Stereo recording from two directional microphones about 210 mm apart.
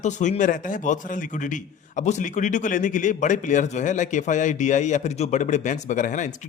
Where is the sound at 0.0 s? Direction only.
35° left (ahead or behind).